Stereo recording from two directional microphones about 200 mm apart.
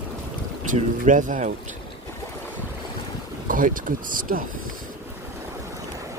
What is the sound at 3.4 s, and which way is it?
Speech, 40° right (ahead or behind).